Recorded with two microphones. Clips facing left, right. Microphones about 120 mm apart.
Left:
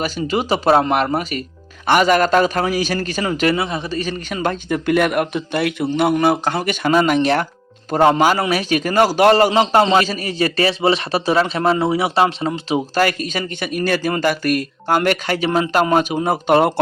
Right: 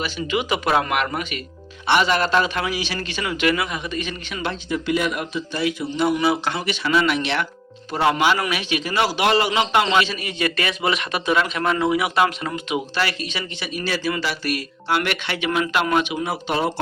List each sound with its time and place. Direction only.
0.0 s a man's voice: 35° left (ahead or behind); by 16.7 s 55° left (ahead or behind)